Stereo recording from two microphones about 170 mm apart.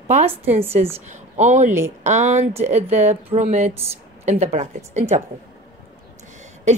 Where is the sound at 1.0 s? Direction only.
45° right (ahead or behind).